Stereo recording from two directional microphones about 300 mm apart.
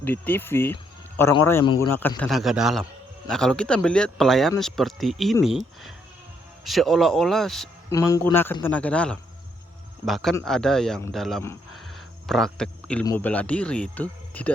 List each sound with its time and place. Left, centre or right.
0.0 s speech: centre
13.9 s cricket: centre